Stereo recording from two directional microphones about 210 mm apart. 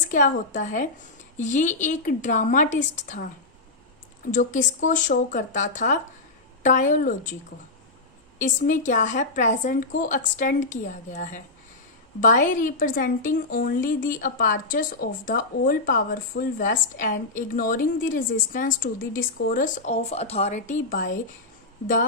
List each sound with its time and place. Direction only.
0.1 s a woman's voice: 35° left (ahead or behind)
4.3 s a woman's voice: 35° left (ahead or behind)
8.4 s a woman's voice: 40° left (ahead or behind)